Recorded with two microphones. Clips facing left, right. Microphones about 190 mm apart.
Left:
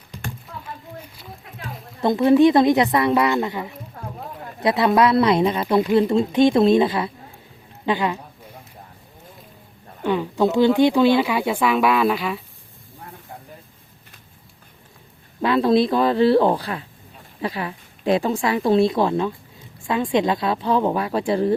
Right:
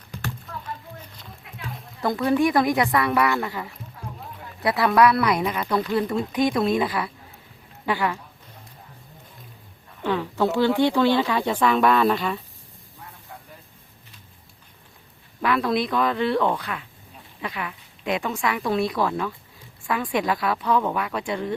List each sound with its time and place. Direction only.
2.0 s speech: 25° left (ahead or behind)
4.0 s run: 50° left (ahead or behind)
4.6 s speech: 20° left (ahead or behind)
10.0 s speech: 15° left (ahead or behind)
15.4 s a woman's voice: 25° left (ahead or behind)